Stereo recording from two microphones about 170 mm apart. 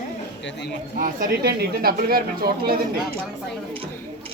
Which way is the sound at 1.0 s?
60° right (ahead or behind).